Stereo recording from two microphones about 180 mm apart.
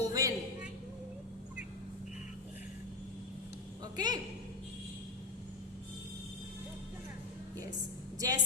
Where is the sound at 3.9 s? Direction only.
20° right (ahead or behind).